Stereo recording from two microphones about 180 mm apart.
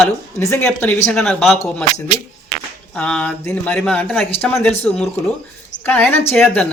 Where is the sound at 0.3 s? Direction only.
15° left (ahead or behind).